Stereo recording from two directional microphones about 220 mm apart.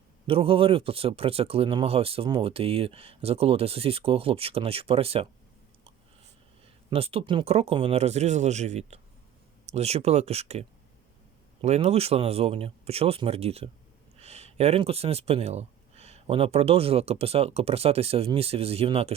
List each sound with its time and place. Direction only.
0.3 s speech: 25° right (ahead or behind)
6.9 s speech: 25° right (ahead or behind)